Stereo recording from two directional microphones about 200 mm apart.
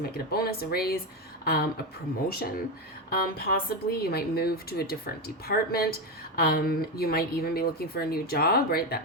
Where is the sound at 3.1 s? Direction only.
50° left (ahead or behind).